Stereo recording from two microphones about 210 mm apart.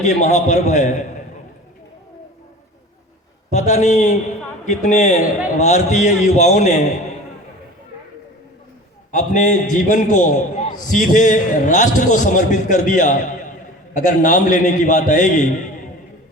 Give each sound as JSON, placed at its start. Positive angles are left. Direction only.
{"t": 0.0, "sound": "a man's voice", "side_deg": 35}
{"t": 3.5, "sound": "a man's voice", "side_deg": 35}
{"t": 9.1, "sound": "a man's voice", "side_deg": 35}